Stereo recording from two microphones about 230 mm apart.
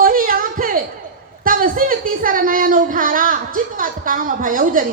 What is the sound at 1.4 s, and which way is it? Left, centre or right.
A woman's voice, right.